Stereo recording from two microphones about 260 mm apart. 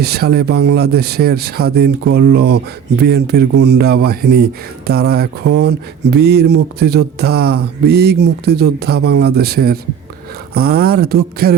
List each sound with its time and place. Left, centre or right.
0.0 s speech: right